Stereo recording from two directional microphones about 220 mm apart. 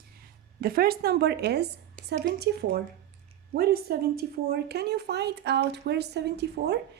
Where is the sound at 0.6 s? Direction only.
40° right (ahead or behind).